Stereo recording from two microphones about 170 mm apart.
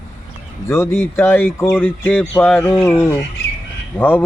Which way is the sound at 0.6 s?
15° left (ahead or behind).